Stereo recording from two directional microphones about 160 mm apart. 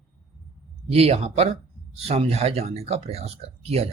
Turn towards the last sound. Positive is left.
turn(degrees=-40)  # may be behind; listen again after turning